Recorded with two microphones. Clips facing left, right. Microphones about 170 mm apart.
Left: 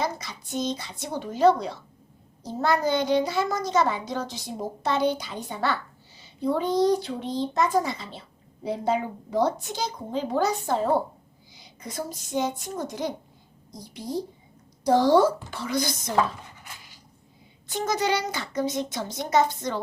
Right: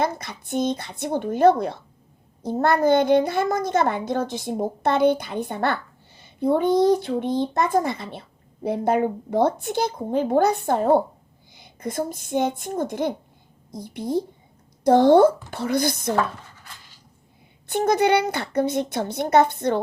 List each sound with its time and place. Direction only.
0.0 s a child's voice: 55° right (ahead or behind)
16.1 s a sound: 15° left (ahead or behind)
17.7 s a child's voice: 60° right (ahead or behind)